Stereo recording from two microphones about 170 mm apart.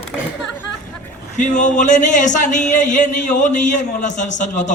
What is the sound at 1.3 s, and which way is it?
A man's voice, 45° left (ahead or behind).